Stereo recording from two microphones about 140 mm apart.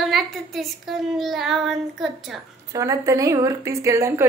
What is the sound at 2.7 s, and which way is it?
A woman's voice, 25° right (ahead or behind).